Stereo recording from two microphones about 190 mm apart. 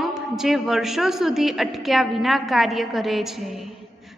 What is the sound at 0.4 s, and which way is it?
A woman's voice, centre (ahead or behind).